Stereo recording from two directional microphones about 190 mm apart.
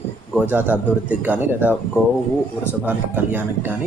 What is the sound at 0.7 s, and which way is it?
A woman's voice, 10° right (ahead or behind).